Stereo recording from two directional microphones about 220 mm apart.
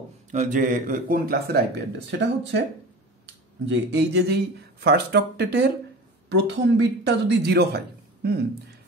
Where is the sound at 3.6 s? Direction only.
55° right (ahead or behind).